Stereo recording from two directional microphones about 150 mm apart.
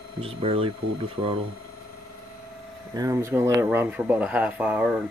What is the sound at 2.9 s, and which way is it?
Speech, 20° right (ahead or behind).